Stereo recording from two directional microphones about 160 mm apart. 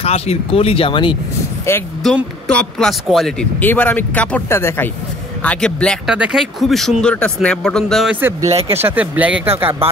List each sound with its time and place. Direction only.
0.0 s speech: 40° left (ahead or behind)
1.7 s speech: 15° left (ahead or behind)
2.0 s speech: centre (ahead or behind)
6.0 s speech: 5° right (ahead or behind)
8.2 s speech: 15° right (ahead or behind)
8.5 s speech: 40° right (ahead or behind)
8.8 s speech: 10° right (ahead or behind)